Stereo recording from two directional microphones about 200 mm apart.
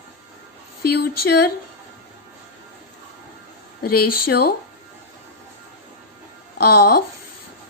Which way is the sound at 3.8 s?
50° left (ahead or behind).